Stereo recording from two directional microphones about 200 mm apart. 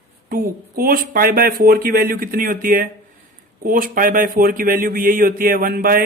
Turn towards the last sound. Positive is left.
turn(degrees=-45)  # may be behind; listen again after turning